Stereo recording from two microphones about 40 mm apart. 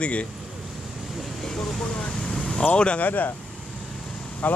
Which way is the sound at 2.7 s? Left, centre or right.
Left.